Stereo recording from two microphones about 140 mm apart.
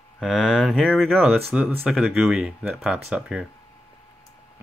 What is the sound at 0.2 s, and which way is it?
Speech, centre (ahead or behind).